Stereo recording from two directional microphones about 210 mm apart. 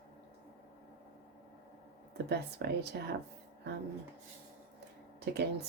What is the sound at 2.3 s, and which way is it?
Speech, 50° right (ahead or behind).